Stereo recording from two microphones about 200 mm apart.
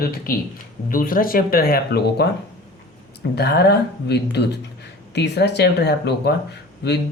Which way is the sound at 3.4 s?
55° left (ahead or behind).